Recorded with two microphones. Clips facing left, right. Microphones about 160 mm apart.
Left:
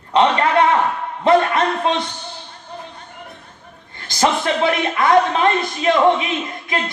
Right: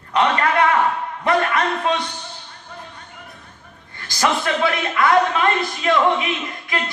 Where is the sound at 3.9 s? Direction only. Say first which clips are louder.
Left 3 dB; 25° left (ahead or behind).